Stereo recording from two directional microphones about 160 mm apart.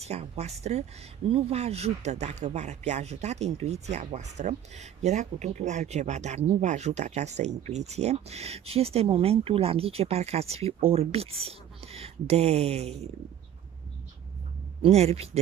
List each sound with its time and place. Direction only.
0.0 s speech: 40° right (ahead or behind)
14.8 s speech: 40° right (ahead or behind)